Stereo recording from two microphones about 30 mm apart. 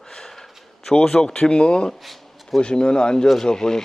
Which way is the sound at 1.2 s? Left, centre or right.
Left.